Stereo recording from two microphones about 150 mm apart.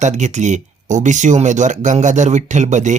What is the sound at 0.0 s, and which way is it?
Speech, 50° right (ahead or behind).